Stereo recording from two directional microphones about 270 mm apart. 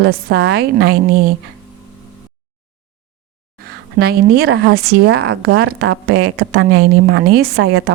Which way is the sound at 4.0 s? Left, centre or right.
Right.